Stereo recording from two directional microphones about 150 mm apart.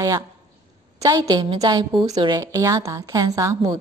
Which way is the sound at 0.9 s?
25° right (ahead or behind).